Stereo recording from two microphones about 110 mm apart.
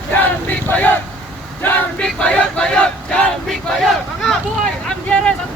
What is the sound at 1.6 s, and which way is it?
Vehicle, 20° left (ahead or behind).